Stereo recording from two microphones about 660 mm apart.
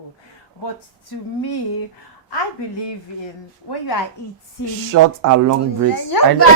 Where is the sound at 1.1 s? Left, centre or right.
Left.